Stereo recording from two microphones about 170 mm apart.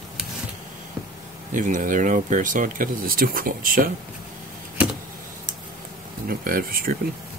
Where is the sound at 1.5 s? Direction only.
50° right (ahead or behind).